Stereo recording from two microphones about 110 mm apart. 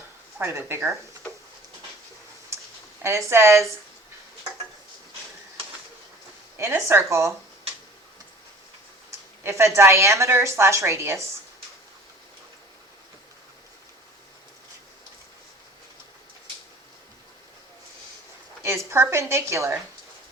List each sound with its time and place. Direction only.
0.3 s speech: 20° right (ahead or behind)
3.0 s speech: 25° right (ahead or behind)
6.6 s speech: 25° right (ahead or behind)
9.0 s speech: 25° right (ahead or behind)
18.6 s a woman's voice: 25° right (ahead or behind)